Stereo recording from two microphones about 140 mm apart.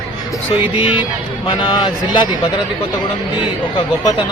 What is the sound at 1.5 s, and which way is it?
Speech, 35° left (ahead or behind).